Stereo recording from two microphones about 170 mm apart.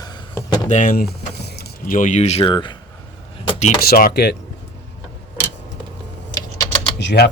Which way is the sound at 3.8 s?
60° left (ahead or behind).